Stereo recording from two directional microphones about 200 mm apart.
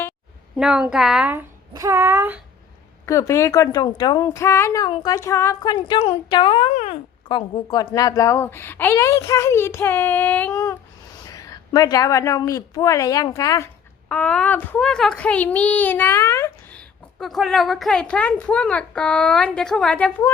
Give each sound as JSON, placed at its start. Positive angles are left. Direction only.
{"t": 0.5, "sound": "a child's voice", "side_deg": -5}
{"t": 3.1, "sound": "a woman's voice", "side_deg": 15}
{"t": 14.1, "sound": "a child's voice", "side_deg": 5}